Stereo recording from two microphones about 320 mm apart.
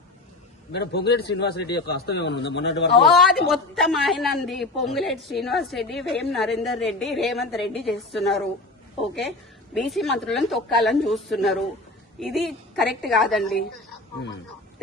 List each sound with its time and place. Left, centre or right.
0.7 s a man's voice: left
3.0 s a woman's voice: centre
9.7 s a woman's voice: centre